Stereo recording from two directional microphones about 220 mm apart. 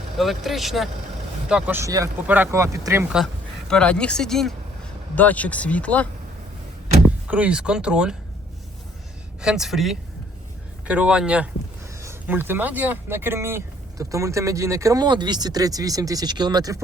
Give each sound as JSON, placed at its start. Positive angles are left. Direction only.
{"t": 0.2, "sound": "speech", "side_deg": 0}
{"t": 3.7, "sound": "speech", "side_deg": 5}
{"t": 7.3, "sound": "speech", "side_deg": -5}
{"t": 9.4, "sound": "speech", "side_deg": -5}